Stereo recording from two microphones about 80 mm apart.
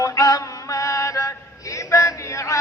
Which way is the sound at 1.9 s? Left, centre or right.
Left.